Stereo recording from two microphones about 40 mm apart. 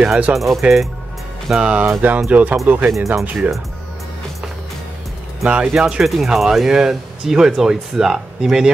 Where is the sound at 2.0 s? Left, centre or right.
Right.